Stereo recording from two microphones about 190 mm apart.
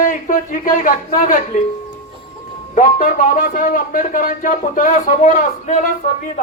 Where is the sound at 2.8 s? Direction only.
45° left (ahead or behind).